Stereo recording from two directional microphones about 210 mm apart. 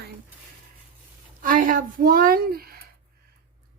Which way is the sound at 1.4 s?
40° right (ahead or behind).